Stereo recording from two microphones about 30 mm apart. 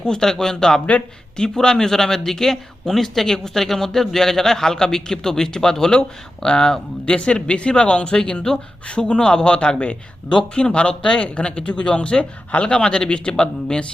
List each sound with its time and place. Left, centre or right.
0.0 s a man's voice: left
0.9 s speech: left
1.6 s a man's voice: left
7.0 s speech: left